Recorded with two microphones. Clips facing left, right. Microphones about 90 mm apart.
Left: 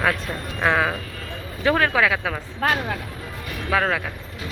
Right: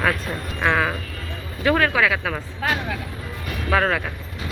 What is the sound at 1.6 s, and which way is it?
Speech, 25° left (ahead or behind).